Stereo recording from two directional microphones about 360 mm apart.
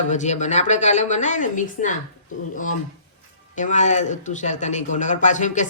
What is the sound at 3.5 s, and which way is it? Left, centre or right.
Speech, left.